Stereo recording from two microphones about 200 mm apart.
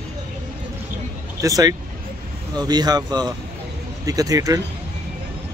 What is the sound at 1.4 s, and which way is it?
Speech, 15° right (ahead or behind).